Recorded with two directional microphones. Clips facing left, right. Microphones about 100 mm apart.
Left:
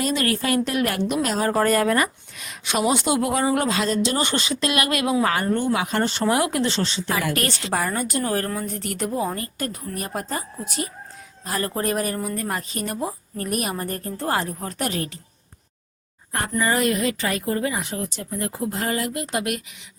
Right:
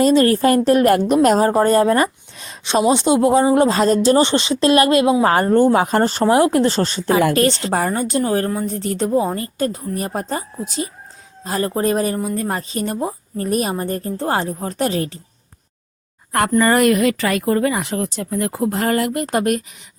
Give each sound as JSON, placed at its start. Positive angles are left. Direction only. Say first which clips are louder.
{"t": 0.0, "sound": "speech", "louder": "right 10 dB", "side_deg": -35}
{"t": 1.4, "sound": "speech", "louder": "right 6 dB", "side_deg": -30}
{"t": 4.2, "sound": "speech", "louder": "right 8 dB", "side_deg": -25}
{"t": 7.3, "sound": "speech", "louder": "right 7 dB", "side_deg": -25}
{"t": 16.3, "sound": "a woman's voice", "louder": "right 8 dB", "side_deg": -70}